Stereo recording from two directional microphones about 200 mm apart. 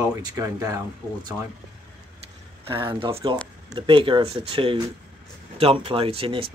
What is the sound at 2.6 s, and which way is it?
Speech, 25° right (ahead or behind).